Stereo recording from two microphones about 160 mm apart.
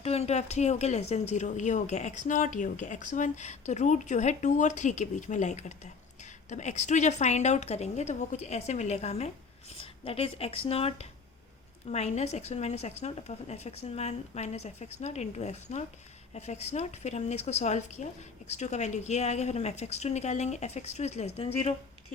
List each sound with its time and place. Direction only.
0.0 s speech: 40° left (ahead or behind)